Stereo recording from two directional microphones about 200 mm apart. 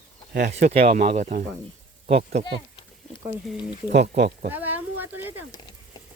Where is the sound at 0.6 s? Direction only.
35° right (ahead or behind).